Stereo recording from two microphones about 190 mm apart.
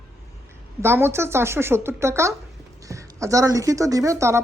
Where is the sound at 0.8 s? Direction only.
10° right (ahead or behind).